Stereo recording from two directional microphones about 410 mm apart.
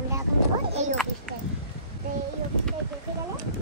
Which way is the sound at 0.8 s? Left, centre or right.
Centre.